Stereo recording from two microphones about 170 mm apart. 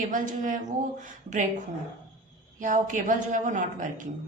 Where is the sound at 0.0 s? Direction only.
50° right (ahead or behind).